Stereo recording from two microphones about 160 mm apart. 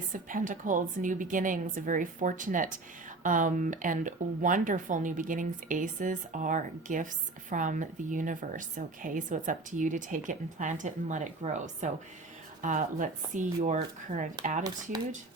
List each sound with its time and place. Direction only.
0.1 s a woman's voice: 55° right (ahead or behind)